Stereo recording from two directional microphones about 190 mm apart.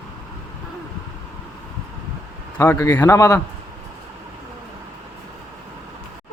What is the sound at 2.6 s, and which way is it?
Speech, 15° left (ahead or behind).